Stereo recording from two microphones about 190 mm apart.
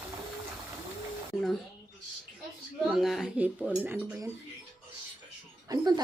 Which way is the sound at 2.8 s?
Centre (ahead or behind).